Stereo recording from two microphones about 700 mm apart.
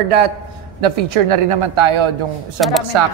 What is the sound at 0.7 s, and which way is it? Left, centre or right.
A woman's voice, right.